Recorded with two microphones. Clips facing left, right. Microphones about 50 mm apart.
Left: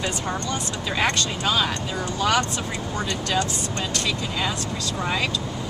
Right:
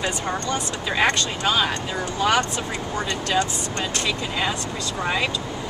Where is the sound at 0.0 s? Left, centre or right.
Centre.